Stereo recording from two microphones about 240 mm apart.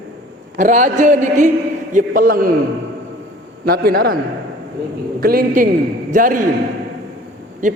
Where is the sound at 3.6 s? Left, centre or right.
Right.